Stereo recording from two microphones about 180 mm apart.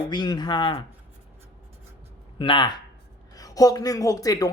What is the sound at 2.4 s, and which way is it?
A man's voice, 25° left (ahead or behind).